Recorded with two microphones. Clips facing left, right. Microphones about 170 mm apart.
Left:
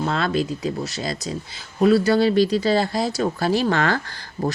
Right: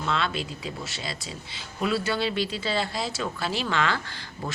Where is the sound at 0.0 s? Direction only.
40° left (ahead or behind).